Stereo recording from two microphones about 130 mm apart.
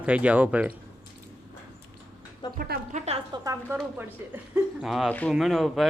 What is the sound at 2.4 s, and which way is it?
Music, 35° left (ahead or behind).